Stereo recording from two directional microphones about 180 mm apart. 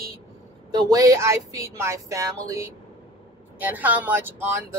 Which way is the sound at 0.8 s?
15° right (ahead or behind).